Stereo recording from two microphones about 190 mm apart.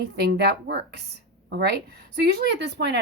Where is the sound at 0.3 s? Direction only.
60° right (ahead or behind).